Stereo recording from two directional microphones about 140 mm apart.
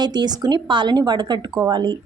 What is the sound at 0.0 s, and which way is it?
A woman's voice, 30° right (ahead or behind).